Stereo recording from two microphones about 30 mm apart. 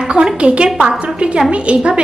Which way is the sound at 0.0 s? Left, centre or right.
Right.